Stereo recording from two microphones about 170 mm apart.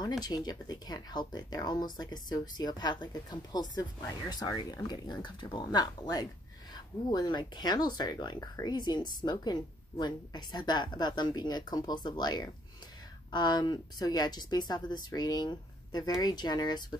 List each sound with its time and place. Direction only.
0.2 s speech: 25° left (ahead or behind)